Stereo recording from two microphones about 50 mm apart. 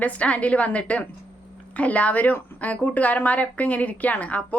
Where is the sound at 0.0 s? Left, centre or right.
Left.